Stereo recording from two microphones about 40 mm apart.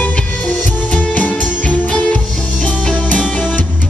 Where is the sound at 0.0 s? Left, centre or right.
Left.